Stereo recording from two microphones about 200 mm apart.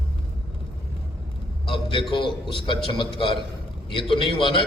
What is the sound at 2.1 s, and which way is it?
A man's voice, 25° left (ahead or behind).